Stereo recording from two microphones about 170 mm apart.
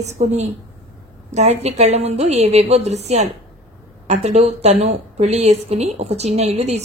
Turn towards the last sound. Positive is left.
turn(degrees=-40)  # may be behind; listen again after turning